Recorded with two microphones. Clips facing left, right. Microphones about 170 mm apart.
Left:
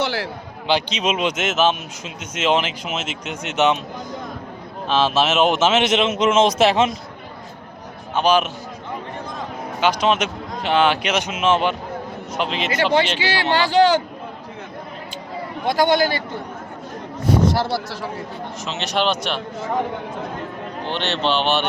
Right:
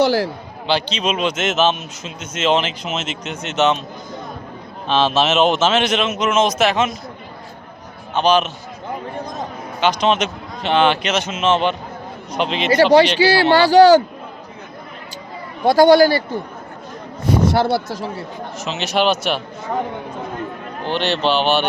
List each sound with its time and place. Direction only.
0.0 s a man's voice: 40° right (ahead or behind)
0.7 s speech: 15° left (ahead or behind)
4.9 s a man's voice: 5° left (ahead or behind); by 6.9 s 30° left (ahead or behind)
8.1 s speech: 10° left (ahead or behind)
9.8 s speech: 5° left (ahead or behind)
12.6 s speech: 35° right (ahead or behind)
15.6 s speech: 40° right (ahead or behind)
17.5 s speech: 55° right (ahead or behind)
18.6 s speech: 5° right (ahead or behind)
20.8 s speech: 5° right (ahead or behind)